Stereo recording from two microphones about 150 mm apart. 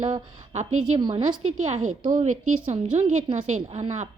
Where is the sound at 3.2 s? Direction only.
45° right (ahead or behind).